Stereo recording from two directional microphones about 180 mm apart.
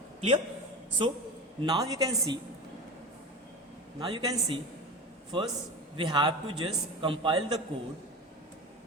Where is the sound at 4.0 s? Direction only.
20° right (ahead or behind).